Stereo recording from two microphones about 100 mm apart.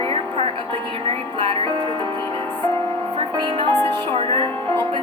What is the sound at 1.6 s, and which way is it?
Music, 55° right (ahead or behind).